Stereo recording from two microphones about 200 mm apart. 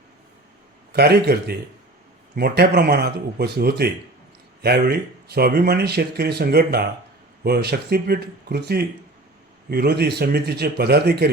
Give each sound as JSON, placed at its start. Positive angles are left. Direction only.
{"t": 0.9, "sound": "speech", "side_deg": -55}